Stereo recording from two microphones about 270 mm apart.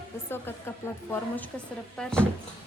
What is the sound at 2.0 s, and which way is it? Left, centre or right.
Speech, centre.